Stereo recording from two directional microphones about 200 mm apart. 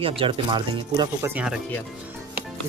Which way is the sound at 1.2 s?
10° right (ahead or behind).